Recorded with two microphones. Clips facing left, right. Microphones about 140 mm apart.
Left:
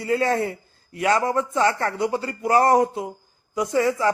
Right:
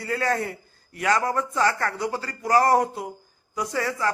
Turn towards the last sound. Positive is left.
turn(degrees=20)  # may be behind; listen again after turning